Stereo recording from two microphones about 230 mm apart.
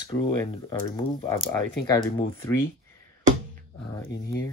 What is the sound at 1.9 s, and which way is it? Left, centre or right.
Speech, centre.